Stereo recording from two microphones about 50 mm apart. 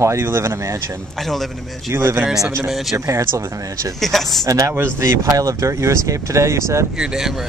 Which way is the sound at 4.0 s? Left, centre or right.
Centre.